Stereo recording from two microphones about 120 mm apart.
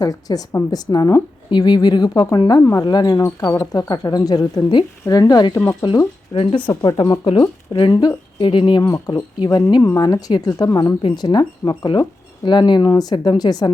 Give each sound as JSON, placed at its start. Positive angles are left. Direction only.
{"t": 0.0, "sound": "speech", "side_deg": 30}